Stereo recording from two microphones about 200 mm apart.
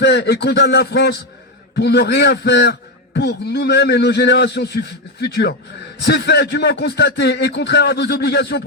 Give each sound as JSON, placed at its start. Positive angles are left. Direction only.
{"t": 0.0, "sound": "a man's voice", "side_deg": 60}